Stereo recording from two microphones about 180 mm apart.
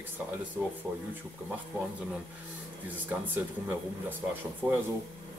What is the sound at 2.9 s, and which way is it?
Speech, 10° right (ahead or behind).